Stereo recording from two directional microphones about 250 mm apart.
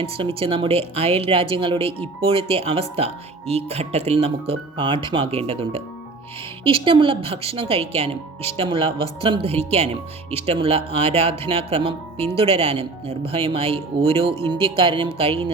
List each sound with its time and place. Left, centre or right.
0.0 s speech: right